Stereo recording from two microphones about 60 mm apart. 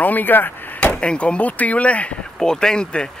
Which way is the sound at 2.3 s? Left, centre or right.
Centre.